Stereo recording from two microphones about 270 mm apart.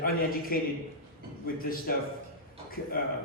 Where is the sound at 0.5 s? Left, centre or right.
Left.